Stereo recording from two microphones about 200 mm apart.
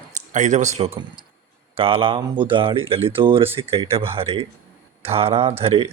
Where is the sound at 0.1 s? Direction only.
35° right (ahead or behind).